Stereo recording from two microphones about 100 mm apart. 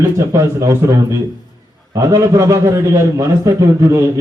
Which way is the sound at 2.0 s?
30° right (ahead or behind).